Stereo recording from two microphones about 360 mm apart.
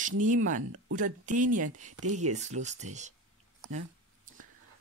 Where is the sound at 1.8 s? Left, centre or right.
Right.